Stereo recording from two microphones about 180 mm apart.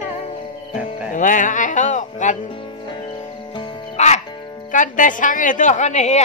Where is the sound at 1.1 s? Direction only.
45° left (ahead or behind).